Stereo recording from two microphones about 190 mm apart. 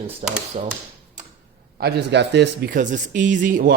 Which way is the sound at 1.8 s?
60° right (ahead or behind).